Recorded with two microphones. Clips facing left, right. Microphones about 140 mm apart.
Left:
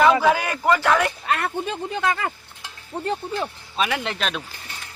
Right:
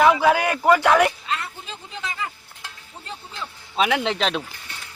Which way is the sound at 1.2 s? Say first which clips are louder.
Left 6 dB; 65° left (ahead or behind).